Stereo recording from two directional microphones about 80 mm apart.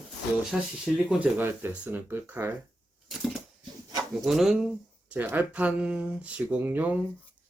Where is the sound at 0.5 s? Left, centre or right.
Centre.